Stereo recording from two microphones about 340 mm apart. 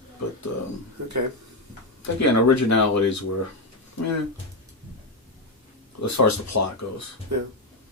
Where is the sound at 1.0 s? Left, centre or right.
Right.